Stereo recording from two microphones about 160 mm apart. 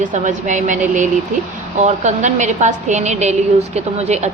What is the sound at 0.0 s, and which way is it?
A woman's voice, 50° right (ahead or behind).